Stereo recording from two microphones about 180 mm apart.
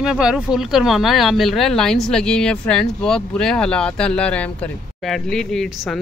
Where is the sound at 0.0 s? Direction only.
5° right (ahead or behind).